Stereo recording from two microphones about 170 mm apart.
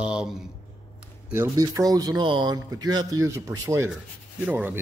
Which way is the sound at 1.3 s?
20° right (ahead or behind).